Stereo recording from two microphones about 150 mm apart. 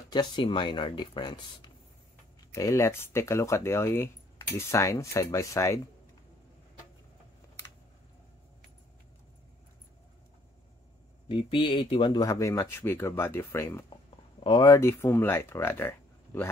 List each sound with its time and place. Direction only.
0.1 s speech: 30° left (ahead or behind)
2.5 s speech: 20° left (ahead or behind)
11.2 s speech: 35° left (ahead or behind); by 13.8 s 15° left (ahead or behind)
14.4 s speech: 30° left (ahead or behind)